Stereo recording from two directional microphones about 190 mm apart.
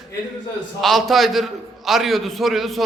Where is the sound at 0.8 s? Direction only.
Centre (ahead or behind).